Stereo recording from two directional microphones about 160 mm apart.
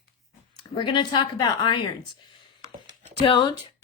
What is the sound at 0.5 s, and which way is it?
Speech, 30° left (ahead or behind).